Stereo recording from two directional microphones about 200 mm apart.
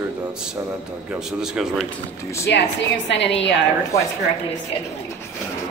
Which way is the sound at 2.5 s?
60° left (ahead or behind).